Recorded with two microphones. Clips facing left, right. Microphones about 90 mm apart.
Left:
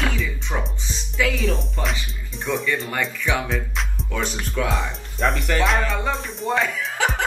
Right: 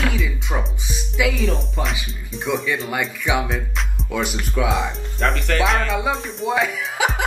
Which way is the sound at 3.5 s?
Centre (ahead or behind).